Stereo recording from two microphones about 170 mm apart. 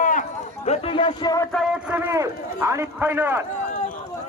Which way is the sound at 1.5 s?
5° right (ahead or behind).